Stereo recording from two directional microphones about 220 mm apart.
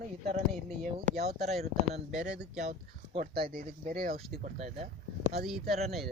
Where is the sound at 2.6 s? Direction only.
35° right (ahead or behind).